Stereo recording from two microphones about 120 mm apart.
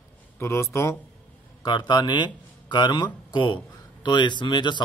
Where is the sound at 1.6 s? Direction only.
35° left (ahead or behind).